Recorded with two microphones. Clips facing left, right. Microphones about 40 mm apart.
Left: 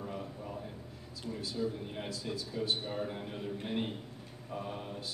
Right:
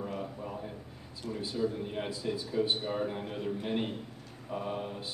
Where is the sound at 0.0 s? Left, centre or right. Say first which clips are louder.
Right 4 dB; right.